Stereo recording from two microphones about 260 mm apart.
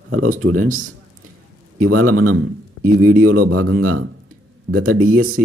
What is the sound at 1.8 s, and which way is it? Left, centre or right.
Speech, right.